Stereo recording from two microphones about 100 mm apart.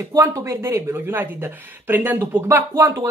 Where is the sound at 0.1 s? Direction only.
35° right (ahead or behind).